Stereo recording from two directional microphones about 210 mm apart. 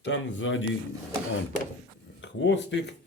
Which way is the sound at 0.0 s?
60° left (ahead or behind).